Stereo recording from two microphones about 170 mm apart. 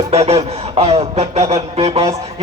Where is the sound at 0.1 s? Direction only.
35° right (ahead or behind).